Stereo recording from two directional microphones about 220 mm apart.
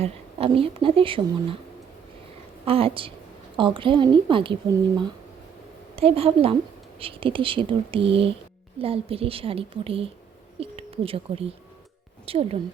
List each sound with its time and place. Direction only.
0.0 s speech: 25° right (ahead or behind)
2.6 s speech: 25° right (ahead or behind)
6.0 s a woman's voice: 25° right (ahead or behind)